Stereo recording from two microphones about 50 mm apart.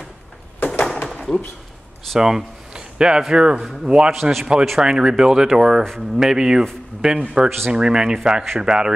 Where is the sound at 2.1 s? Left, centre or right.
Centre.